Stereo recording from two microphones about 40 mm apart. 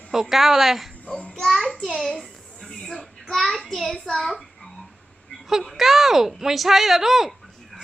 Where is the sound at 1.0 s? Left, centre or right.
Left.